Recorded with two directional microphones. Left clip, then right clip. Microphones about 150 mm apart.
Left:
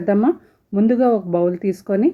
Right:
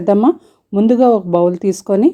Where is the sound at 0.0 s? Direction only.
35° right (ahead or behind).